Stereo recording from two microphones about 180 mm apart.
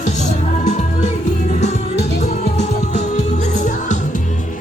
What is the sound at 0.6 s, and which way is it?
Music, 40° left (ahead or behind).